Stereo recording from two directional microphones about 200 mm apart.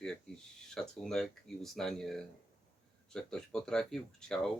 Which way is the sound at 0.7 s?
Centre (ahead or behind).